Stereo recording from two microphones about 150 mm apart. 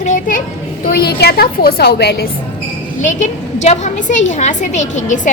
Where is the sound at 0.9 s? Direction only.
90° left.